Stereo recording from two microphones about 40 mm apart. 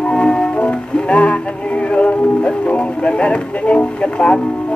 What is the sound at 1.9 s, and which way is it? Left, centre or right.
Speech, left.